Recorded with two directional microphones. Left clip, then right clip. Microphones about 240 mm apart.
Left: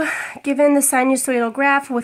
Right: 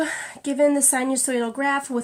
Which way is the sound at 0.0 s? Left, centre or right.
Left.